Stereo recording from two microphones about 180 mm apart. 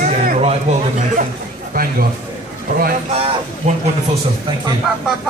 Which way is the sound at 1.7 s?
55° right (ahead or behind).